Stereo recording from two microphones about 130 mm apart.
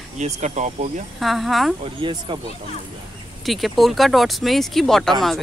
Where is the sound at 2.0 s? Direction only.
40° right (ahead or behind).